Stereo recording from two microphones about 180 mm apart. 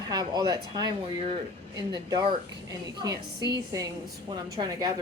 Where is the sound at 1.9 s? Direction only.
20° right (ahead or behind).